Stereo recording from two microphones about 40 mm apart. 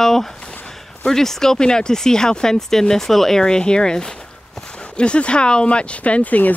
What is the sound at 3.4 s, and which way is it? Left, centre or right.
Speech, left.